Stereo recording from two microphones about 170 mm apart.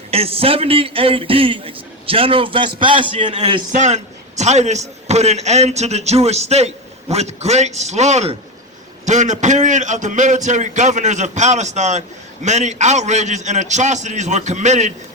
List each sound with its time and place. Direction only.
0.1 s a man's voice: 35° right (ahead or behind)
3.7 s a man's voice: 45° right (ahead or behind)